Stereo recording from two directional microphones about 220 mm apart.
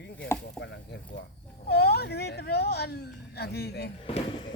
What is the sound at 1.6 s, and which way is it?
Speech, 45° left (ahead or behind).